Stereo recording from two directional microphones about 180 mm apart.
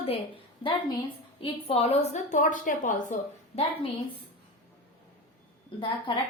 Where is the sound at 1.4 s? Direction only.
30° left (ahead or behind).